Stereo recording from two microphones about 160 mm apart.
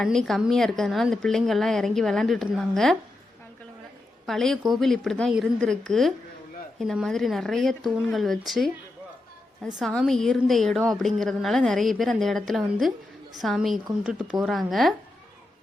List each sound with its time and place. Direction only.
0.0 s a woman's voice: centre (ahead or behind)
4.3 s a woman's voice: centre (ahead or behind)